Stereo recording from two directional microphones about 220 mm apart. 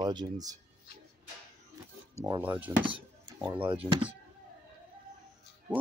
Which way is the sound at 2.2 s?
15° right (ahead or behind).